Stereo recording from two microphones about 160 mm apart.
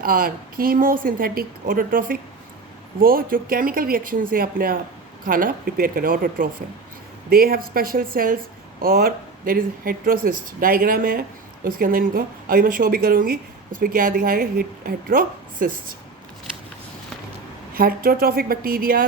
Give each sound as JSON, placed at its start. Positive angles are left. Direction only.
{"t": 0.0, "sound": "speech", "side_deg": -65}
{"t": 17.7, "sound": "speech", "side_deg": -65}